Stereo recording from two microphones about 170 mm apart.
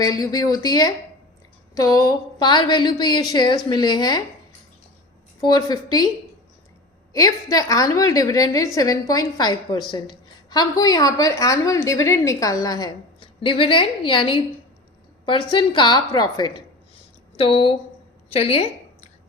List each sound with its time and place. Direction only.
0.0 s a woman's voice: 20° left (ahead or behind)
5.4 s a woman's voice: 25° left (ahead or behind)
7.1 s a woman's voice: 20° left (ahead or behind)